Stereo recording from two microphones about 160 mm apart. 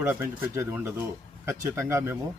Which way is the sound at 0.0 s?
15° right (ahead or behind).